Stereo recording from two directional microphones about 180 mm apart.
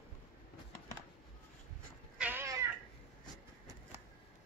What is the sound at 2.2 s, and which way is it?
Cat, 10° right (ahead or behind).